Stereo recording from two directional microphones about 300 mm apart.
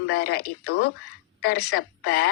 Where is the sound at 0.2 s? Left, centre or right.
Left.